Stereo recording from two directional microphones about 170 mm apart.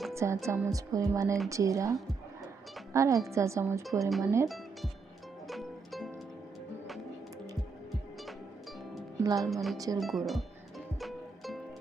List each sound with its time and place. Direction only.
0.1 s music: 15° right (ahead or behind)
0.4 s a woman's voice: 20° right (ahead or behind)
4.4 s speech: centre (ahead or behind)
5.5 s music: centre (ahead or behind)
9.2 s speech: 20° right (ahead or behind)
9.5 s speech: centre (ahead or behind)
9.7 s speech: 20° right (ahead or behind)
10.0 s music: centre (ahead or behind)